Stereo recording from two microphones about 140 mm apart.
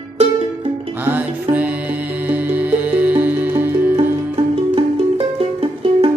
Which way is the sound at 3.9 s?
40° right (ahead or behind).